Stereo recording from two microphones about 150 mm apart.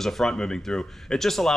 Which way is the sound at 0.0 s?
5° left (ahead or behind).